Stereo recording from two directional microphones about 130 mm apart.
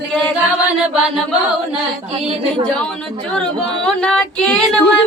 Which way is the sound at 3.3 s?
5° left (ahead or behind).